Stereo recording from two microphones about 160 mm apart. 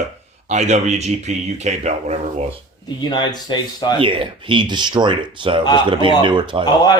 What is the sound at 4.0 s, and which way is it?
Speech, 30° right (ahead or behind).